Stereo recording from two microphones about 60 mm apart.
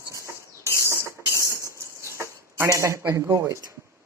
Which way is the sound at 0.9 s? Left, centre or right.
Right.